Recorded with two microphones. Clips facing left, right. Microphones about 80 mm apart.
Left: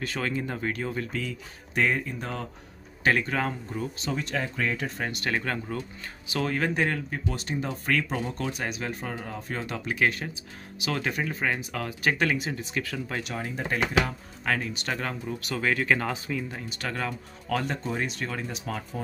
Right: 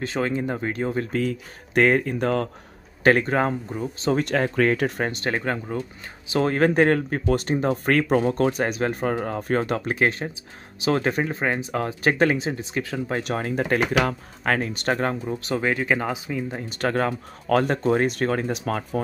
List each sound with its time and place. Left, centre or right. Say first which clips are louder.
0.0 s speech: right 5 dB; right
1.1 s speech: right 8 dB; right
1.7 s speech: right 7 dB; right
3.0 s speech: right 6 dB; right
4.1 s speech: right 10 dB; right
5.0 s speech: right 4 dB; right
13.2 s speech: right 7 dB; right
14.5 s speech: right 6 dB; right; by 16.5 s centre
16.5 s speech: right 9 dB; right